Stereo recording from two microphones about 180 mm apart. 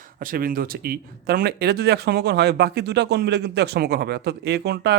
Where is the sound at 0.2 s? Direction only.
50° right (ahead or behind).